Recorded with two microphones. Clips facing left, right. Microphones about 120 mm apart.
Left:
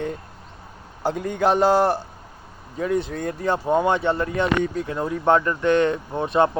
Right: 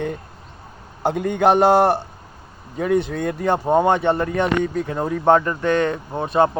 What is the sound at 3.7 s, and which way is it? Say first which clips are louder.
Speech: right 3 dB; 55° right (ahead or behind).